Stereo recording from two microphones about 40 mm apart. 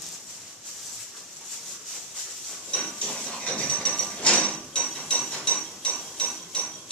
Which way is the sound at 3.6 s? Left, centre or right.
Left.